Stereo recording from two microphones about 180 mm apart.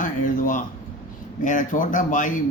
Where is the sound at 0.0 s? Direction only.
45° left (ahead or behind).